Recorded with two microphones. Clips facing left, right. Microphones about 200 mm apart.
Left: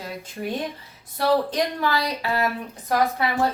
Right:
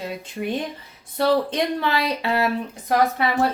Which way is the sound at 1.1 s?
25° right (ahead or behind).